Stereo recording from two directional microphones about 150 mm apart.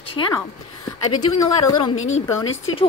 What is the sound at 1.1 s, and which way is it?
Speech, 25° left (ahead or behind).